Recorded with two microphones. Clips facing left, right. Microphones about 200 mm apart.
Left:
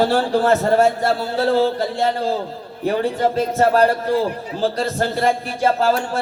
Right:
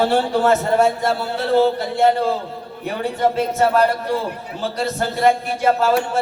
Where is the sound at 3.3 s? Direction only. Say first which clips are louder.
Left 1 dB; 35° left (ahead or behind).